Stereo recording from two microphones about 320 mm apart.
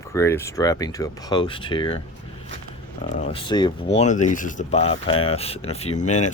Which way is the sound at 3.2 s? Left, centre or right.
Centre.